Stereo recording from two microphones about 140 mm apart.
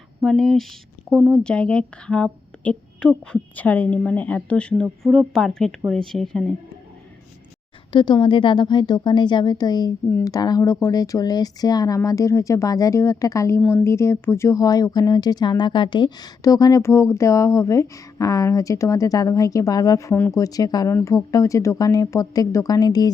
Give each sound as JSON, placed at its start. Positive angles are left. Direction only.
{"t": 0.3, "sound": "speech", "side_deg": 5}
{"t": 7.9, "sound": "speech", "side_deg": 35}